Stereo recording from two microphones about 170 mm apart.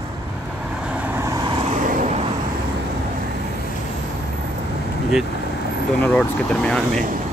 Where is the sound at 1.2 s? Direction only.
20° right (ahead or behind).